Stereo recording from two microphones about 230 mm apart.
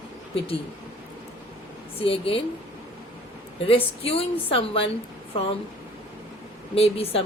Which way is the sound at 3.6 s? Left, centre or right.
Left.